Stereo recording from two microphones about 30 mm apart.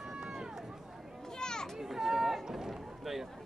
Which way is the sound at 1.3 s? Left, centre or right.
Left.